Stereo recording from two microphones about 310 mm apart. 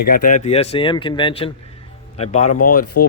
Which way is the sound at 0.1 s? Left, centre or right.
Left.